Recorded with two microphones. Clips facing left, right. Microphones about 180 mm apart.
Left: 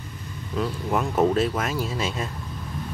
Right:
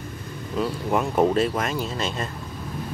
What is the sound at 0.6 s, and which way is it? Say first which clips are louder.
Speech: right 2 dB; 5° right (ahead or behind).